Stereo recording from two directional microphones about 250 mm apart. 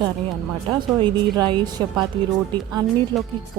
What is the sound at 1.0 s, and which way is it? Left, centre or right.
Speech, centre.